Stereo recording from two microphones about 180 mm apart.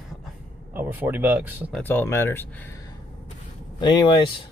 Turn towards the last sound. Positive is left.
turn(degrees=25)  # may be behind; listen again after turning